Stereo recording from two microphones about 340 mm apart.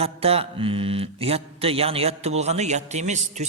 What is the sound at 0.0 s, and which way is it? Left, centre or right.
Mantra, centre.